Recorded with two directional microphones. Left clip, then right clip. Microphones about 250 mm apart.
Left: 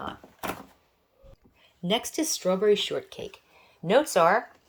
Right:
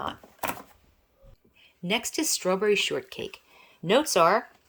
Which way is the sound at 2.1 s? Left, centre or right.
Centre.